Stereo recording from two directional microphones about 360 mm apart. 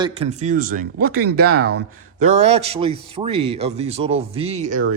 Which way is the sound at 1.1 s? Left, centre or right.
Right.